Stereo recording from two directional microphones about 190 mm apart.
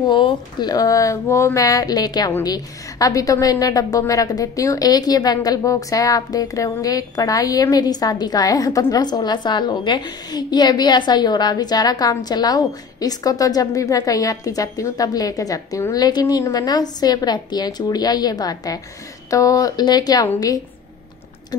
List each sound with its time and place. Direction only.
0.1 s speech: 25° left (ahead or behind)